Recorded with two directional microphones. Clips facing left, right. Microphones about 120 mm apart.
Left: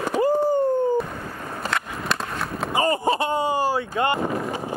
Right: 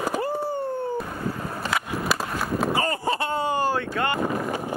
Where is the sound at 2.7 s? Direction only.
20° left (ahead or behind).